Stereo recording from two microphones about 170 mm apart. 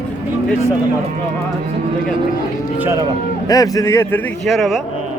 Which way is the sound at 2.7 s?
15° right (ahead or behind).